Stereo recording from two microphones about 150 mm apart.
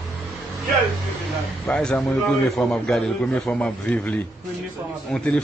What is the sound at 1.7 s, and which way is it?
A man's voice, 5° left (ahead or behind).